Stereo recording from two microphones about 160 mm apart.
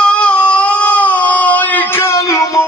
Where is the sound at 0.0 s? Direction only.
5° left (ahead or behind).